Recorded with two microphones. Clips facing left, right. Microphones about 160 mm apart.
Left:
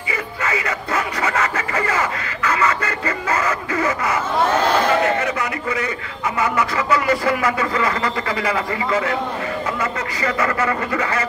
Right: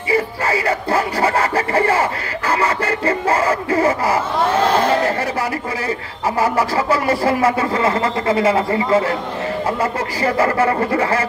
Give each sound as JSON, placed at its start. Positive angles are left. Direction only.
{"t": 0.1, "sound": "speech", "side_deg": -30}
{"t": 4.7, "sound": "a sound", "side_deg": -30}
{"t": 6.4, "sound": "speech", "side_deg": -30}